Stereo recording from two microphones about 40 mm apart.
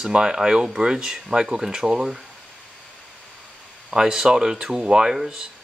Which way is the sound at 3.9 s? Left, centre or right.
Centre.